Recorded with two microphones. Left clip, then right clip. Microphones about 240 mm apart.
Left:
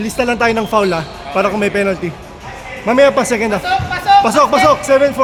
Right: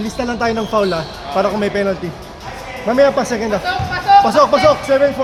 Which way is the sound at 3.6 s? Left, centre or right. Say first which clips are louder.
Left 1 dB; left.